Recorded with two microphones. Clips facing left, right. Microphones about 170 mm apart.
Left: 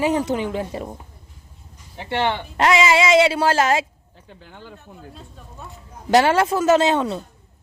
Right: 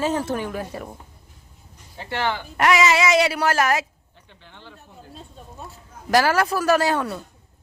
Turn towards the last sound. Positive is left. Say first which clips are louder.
# left 3 dB
turn(degrees=20)  # may be behind; listen again after turning